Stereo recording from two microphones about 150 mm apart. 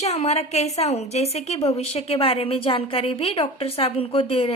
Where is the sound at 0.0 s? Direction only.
45° left (ahead or behind).